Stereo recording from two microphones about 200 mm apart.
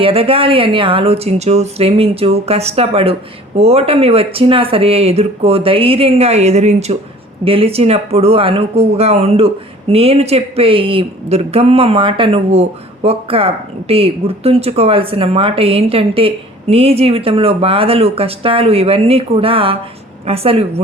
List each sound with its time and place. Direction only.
0.0 s a woman's voice: 30° right (ahead or behind)